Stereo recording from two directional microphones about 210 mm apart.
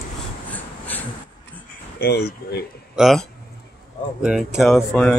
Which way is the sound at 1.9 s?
50° left (ahead or behind).